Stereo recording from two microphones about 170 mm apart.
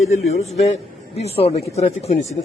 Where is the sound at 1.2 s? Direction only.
35° left (ahead or behind).